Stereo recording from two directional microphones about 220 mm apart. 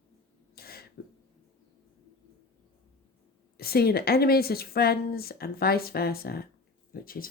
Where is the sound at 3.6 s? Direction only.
45° left (ahead or behind).